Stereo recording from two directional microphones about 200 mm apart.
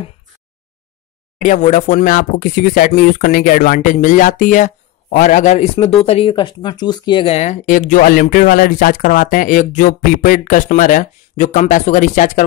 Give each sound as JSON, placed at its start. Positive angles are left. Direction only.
{"t": 1.4, "sound": "speech", "side_deg": 40}